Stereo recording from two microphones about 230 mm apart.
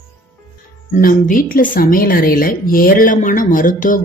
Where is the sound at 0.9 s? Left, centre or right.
Left.